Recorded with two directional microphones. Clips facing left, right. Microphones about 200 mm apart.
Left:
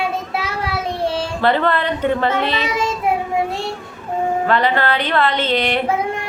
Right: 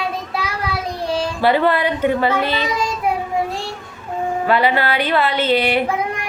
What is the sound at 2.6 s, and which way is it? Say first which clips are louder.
Child singing: left 1 dB; 25° left (ahead or behind).